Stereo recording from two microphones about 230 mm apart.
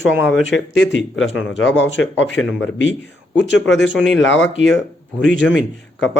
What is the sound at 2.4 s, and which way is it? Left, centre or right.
Speech, left.